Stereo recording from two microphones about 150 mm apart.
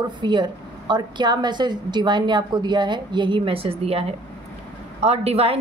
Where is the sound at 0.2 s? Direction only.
30° right (ahead or behind).